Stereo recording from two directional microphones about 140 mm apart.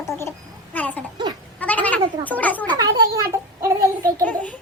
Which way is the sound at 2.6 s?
25° right (ahead or behind).